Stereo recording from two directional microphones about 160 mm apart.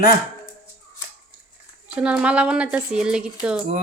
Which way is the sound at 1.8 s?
5° right (ahead or behind).